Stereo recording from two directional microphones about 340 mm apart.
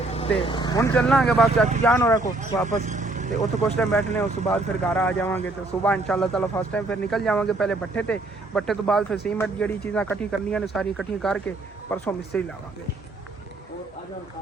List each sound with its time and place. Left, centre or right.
0.1 s speech: centre
2.6 s vehicle: right
3.3 s speech: centre